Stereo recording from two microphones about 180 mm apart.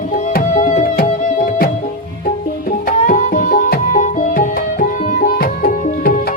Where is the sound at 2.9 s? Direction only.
45° left (ahead or behind).